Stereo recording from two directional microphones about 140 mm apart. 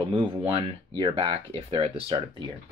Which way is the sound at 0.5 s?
40° right (ahead or behind).